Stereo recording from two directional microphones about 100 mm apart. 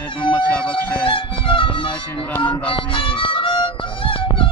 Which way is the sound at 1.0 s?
60° left (ahead or behind).